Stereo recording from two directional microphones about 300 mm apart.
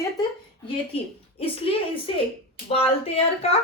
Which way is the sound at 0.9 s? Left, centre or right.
Centre.